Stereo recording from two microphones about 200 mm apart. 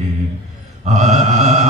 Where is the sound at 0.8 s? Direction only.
35° right (ahead or behind).